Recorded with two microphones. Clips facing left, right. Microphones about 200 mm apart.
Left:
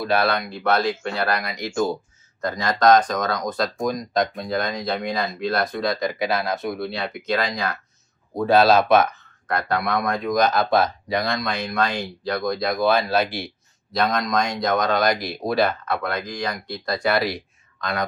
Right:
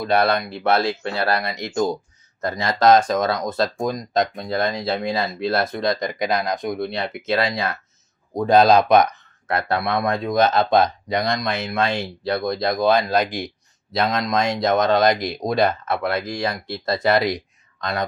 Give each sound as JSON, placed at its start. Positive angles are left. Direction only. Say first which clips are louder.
{"t": 0.0, "sound": "speech", "louder": "right 2 dB", "side_deg": -20}
{"t": 9.6, "sound": "speech", "louder": "right 1 dB", "side_deg": -25}